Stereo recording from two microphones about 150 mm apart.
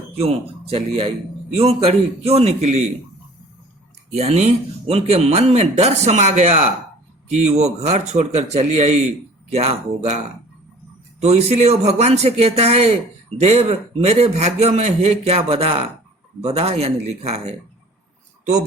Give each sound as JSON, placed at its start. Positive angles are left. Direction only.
{"t": 0.2, "sound": "speech", "side_deg": -40}
{"t": 4.1, "sound": "speech", "side_deg": -45}
{"t": 11.2, "sound": "speech", "side_deg": -45}